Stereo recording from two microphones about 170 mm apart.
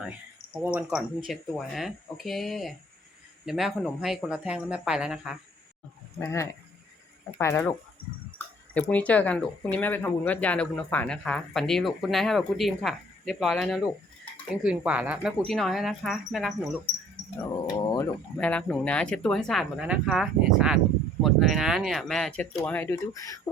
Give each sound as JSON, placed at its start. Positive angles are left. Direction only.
{"t": 0.5, "sound": "speech", "side_deg": -10}
{"t": 6.1, "sound": "speech", "side_deg": 15}
{"t": 8.7, "sound": "speech", "side_deg": 10}
{"t": 17.7, "sound": "speech", "side_deg": 25}
{"t": 18.3, "sound": "speech", "side_deg": 5}